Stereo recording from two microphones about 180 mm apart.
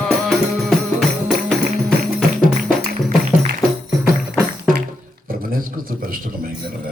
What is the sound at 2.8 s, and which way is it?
Music, 55° right (ahead or behind).